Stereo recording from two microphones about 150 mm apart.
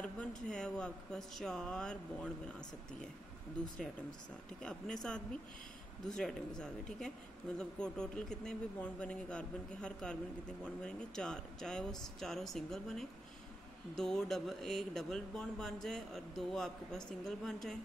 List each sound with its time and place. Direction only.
0.0 s speech: 5° left (ahead or behind)
4.6 s speech: 5° left (ahead or behind)